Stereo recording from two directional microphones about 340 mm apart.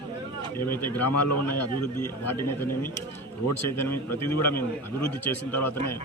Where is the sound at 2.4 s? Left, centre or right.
Centre.